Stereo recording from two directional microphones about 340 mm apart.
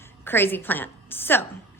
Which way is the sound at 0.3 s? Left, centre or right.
Centre.